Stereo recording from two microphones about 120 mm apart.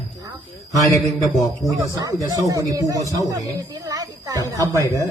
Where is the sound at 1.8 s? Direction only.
30° right (ahead or behind).